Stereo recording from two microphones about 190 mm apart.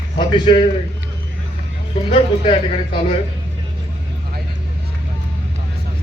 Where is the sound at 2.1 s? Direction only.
30° left (ahead or behind).